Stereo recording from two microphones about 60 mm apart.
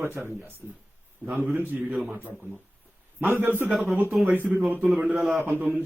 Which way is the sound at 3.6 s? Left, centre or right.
Centre.